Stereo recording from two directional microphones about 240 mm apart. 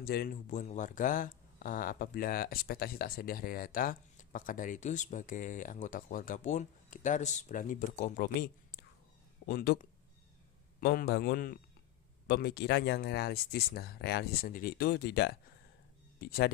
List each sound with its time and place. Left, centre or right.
0.0 s speech: left
9.5 s speech: left